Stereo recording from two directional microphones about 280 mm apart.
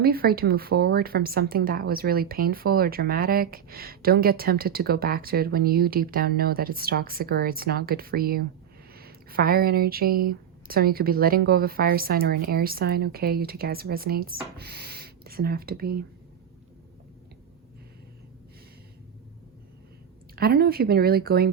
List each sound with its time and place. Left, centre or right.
0.0 s a woman's voice: right
20.3 s a woman's voice: right